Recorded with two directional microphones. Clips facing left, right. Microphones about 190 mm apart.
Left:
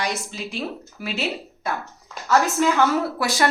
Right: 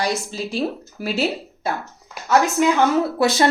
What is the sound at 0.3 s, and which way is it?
A woman's voice, 35° right (ahead or behind).